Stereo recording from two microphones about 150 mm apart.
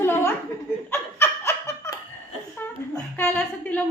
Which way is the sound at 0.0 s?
15° left (ahead or behind).